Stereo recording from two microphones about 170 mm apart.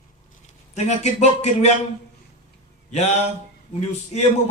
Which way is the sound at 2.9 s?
40° left (ahead or behind).